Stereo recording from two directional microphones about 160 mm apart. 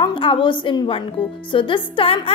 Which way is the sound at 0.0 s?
30° left (ahead or behind).